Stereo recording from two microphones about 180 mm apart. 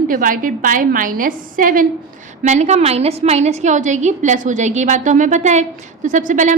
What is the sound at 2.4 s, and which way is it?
A woman's voice, 40° right (ahead or behind).